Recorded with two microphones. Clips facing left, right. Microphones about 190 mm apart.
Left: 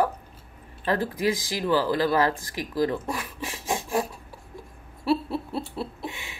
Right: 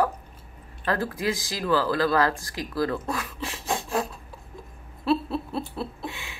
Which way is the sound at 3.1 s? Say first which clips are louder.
Right 1 dB; 15° left (ahead or behind).